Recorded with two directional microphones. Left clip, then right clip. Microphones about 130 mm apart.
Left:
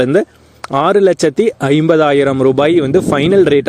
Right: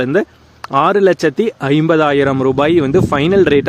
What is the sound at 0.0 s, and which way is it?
Speech, 30° left (ahead or behind).